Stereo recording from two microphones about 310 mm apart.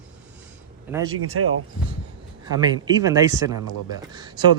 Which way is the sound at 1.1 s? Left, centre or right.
Right.